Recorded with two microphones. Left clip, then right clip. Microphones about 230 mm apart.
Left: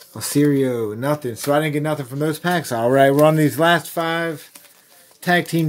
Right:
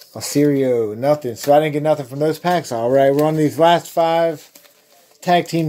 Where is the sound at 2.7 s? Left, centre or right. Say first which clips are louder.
Left 1 dB; left.